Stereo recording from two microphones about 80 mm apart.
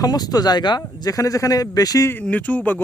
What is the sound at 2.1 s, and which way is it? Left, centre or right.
Speech, left.